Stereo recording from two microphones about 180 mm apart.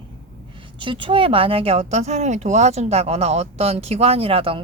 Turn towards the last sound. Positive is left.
turn(degrees=-30)  # may be behind; listen again after turning